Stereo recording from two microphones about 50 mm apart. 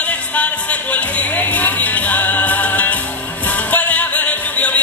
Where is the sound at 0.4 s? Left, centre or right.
Left.